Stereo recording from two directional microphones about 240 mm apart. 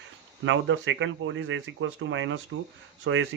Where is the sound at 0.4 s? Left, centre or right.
Right.